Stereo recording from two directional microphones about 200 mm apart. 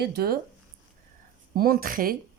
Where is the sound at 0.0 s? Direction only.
55° right (ahead or behind).